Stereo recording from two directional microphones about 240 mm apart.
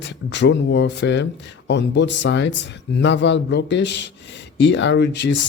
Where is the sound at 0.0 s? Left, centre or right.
Left.